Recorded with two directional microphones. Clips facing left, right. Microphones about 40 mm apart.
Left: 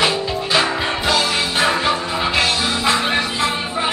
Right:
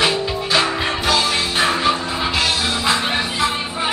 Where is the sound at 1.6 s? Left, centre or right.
Centre.